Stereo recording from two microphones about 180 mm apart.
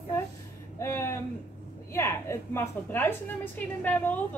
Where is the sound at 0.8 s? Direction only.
15° left (ahead or behind).